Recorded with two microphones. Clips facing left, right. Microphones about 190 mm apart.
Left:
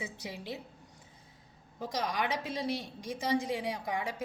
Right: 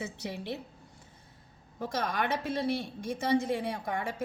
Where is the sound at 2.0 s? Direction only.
55° right (ahead or behind).